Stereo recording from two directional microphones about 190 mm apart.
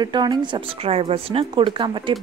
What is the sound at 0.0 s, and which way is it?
Speech, 20° right (ahead or behind).